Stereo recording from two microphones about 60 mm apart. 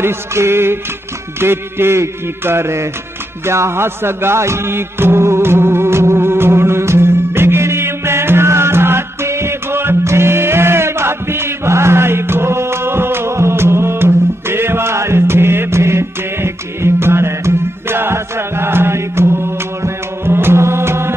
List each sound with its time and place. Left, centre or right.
0.0 s music: right